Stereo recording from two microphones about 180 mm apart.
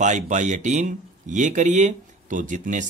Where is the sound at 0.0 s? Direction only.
40° right (ahead or behind).